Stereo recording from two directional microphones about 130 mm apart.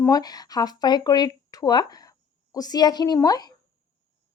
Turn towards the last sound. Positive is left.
turn(degrees=30)  # may be behind; listen again after turning